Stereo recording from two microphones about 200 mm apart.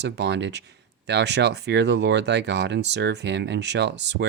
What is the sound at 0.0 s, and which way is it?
Speech, 60° right (ahead or behind).